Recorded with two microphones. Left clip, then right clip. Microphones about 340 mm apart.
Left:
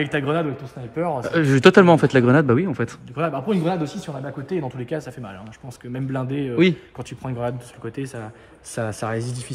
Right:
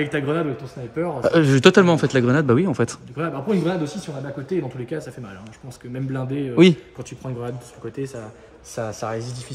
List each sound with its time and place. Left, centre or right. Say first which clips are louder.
0.0 s speech: left 1 dB; centre
1.2 s speech: right 1 dB; centre
3.2 s speech: left 1 dB; centre
6.5 s a man's voice: right 4 dB; centre
7.0 s speech: left 4 dB; centre